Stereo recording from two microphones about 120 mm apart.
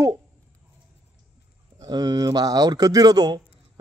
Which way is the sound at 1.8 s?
35° right (ahead or behind).